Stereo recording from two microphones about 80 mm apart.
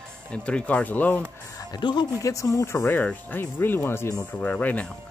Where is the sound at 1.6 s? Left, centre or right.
Left.